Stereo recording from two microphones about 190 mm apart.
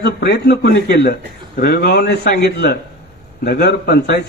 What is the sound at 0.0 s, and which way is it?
A man's voice, 55° left (ahead or behind).